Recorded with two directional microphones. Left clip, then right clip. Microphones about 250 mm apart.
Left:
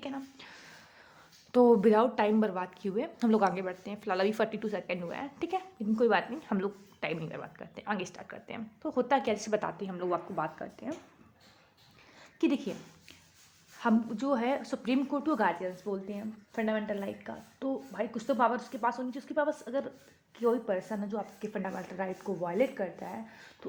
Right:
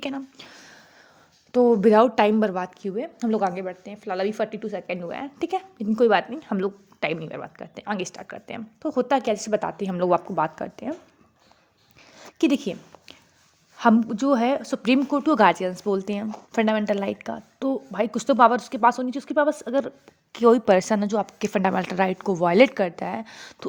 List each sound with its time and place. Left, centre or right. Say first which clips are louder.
0.0 s a sound: right 9 dB; right
1.5 s speech: right 5 dB; centre
1.9 s a woman's voice: right 9 dB; right
2.8 s a woman's voice: right 4 dB; centre; by 10.9 s right
12.1 s a sound: right 8 dB; right
13.7 s a woman's voice: right 11 dB; right